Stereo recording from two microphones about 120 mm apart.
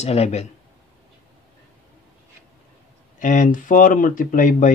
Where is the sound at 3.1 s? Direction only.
90° left.